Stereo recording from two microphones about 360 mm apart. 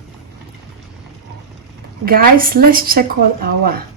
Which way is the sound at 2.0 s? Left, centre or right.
Right.